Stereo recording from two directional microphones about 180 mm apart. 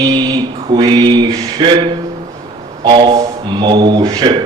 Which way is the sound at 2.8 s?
25° right (ahead or behind).